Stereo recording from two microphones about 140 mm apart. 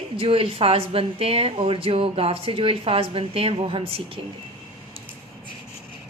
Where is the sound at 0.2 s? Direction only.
40° right (ahead or behind).